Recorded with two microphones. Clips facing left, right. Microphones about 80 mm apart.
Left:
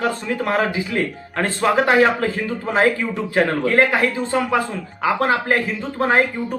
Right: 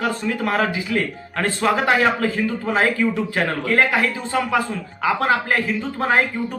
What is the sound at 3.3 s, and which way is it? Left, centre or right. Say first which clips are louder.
Speech: left 6 dB; left.